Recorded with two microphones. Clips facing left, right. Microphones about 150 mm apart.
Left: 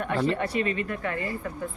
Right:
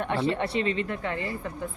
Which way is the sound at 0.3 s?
25° right (ahead or behind).